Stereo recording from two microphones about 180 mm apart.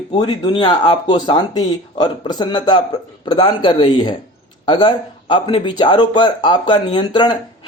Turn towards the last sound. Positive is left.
turn(degrees=25)  # may be behind; listen again after turning